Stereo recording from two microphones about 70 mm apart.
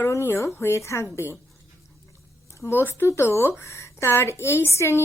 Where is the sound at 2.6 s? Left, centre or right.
Left.